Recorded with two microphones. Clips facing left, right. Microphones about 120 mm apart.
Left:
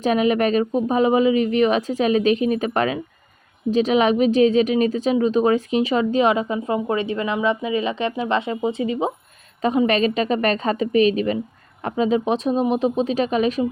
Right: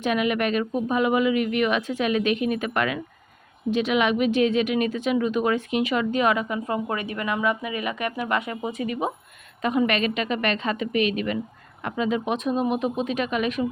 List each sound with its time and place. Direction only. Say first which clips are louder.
0.0 s speech: left 5 dB; 35° left (ahead or behind)